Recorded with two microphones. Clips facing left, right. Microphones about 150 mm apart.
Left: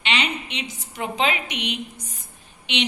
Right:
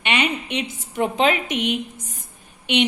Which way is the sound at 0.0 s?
55° right (ahead or behind).